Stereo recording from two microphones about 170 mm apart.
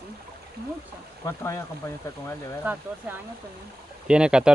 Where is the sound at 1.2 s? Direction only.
15° left (ahead or behind).